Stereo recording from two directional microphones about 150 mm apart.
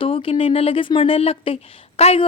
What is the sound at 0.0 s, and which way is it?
A woman's voice, 35° left (ahead or behind).